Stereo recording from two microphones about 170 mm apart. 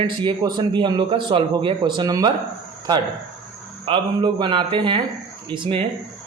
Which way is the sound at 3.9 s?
30° right (ahead or behind).